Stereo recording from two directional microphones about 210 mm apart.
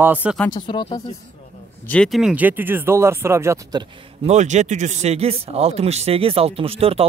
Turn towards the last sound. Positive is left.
turn(degrees=-25)  # may be behind; listen again after turning